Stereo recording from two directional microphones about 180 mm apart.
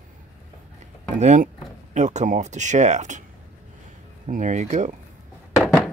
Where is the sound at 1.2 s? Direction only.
40° right (ahead or behind).